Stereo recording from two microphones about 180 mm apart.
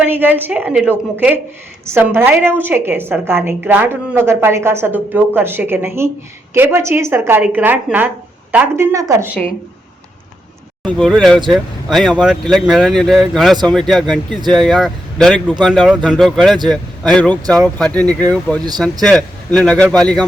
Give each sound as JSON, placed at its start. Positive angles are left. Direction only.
{"t": 0.0, "sound": "a woman's voice", "side_deg": -10}
{"t": 10.8, "sound": "speech", "side_deg": 5}